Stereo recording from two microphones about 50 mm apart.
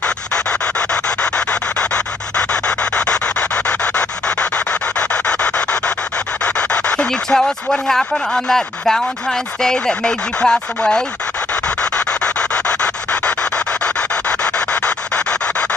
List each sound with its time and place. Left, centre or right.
0.0 s rub: centre
7.1 s speech: centre
11.8 s rub: left